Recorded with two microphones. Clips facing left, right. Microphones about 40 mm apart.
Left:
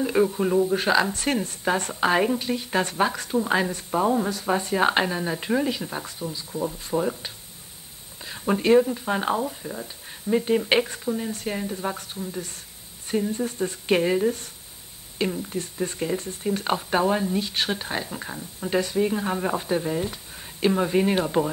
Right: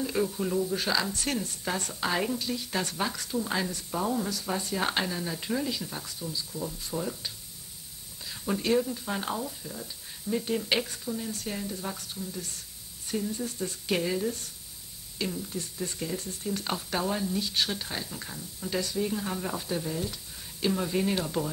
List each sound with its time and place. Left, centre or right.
0.0 s speech: left